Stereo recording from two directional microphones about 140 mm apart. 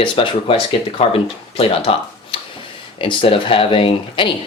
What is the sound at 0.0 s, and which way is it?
Speech, 40° left (ahead or behind).